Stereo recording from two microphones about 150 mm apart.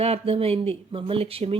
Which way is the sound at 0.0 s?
40° right (ahead or behind).